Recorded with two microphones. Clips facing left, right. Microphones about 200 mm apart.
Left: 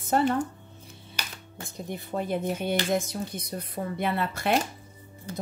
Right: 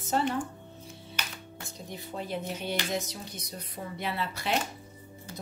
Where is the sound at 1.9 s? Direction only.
55° left (ahead or behind).